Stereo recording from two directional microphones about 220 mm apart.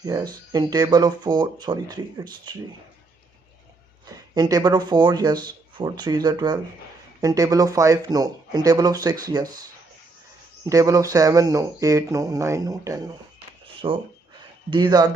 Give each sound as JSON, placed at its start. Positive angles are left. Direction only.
{"t": 0.0, "sound": "speech", "side_deg": -15}
{"t": 4.0, "sound": "speech", "side_deg": -15}
{"t": 10.7, "sound": "speech", "side_deg": -15}